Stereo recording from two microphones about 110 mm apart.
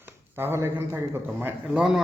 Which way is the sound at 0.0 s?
20° right (ahead or behind).